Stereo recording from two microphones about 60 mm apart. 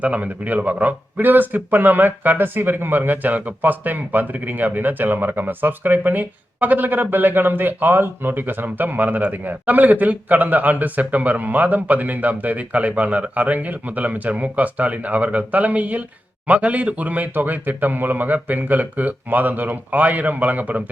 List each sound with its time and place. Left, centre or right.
0.0 s speech: right